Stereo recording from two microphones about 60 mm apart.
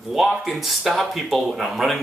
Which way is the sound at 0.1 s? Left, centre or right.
Centre.